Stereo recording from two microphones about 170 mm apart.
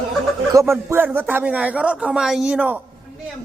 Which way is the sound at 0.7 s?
15° right (ahead or behind).